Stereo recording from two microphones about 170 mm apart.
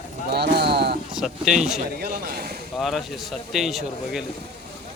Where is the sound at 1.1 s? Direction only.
5° right (ahead or behind).